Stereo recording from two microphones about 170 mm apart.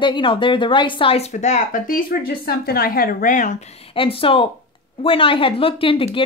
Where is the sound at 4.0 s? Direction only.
30° left (ahead or behind).